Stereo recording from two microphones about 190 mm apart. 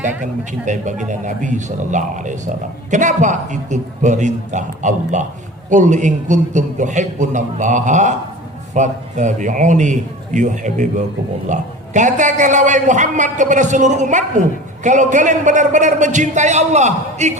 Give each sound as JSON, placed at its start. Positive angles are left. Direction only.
{"t": 0.0, "sound": "a man's voice", "side_deg": -40}